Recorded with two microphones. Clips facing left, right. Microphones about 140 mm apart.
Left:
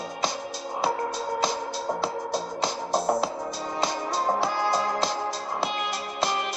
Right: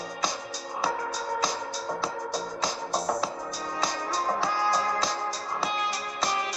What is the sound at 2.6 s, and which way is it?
Music, 25° left (ahead or behind).